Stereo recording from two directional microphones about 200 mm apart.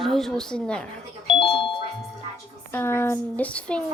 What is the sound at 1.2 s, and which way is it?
Speech, 25° left (ahead or behind).